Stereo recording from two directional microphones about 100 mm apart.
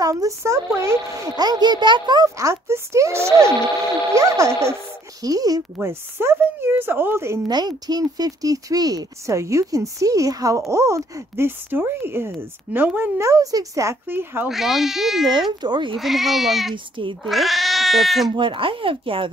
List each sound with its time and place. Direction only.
0.0 s speech: 35° right (ahead or behind)
2.3 s speech: 30° right (ahead or behind)
5.8 s speech: 25° right (ahead or behind)
7.4 s speech: 45° right (ahead or behind); by 13.1 s 20° right (ahead or behind)
13.2 s speech: 35° right (ahead or behind)
14.0 s speech: 20° right (ahead or behind)
14.5 s speech: centre (ahead or behind)
15.6 s speech: 50° right (ahead or behind)
16.0 s speech: centre (ahead or behind)
16.7 s speech: 55° right (ahead or behind)
17.2 s speech: centre (ahead or behind)
18.3 s speech: 60° right (ahead or behind)